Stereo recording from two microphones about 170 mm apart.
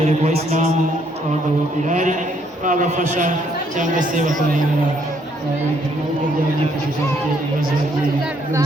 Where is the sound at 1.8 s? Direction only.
50° right (ahead or behind).